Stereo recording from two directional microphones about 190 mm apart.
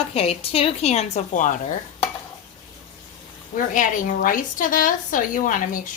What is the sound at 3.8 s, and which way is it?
A woman's voice, 45° left (ahead or behind).